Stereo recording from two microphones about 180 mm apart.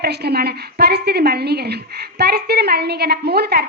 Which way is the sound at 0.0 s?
65° right (ahead or behind).